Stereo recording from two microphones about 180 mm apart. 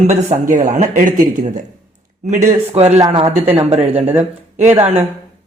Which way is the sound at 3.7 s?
35° right (ahead or behind).